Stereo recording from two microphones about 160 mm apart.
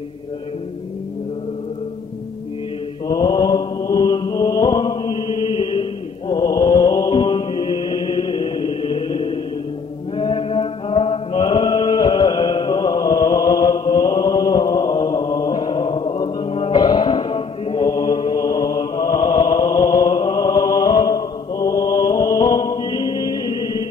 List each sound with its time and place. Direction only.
3.1 s mantra: 25° left (ahead or behind)
10.1 s chant: 30° left (ahead or behind)
16.5 s music: 30° left (ahead or behind)
19.1 s chant: 25° left (ahead or behind)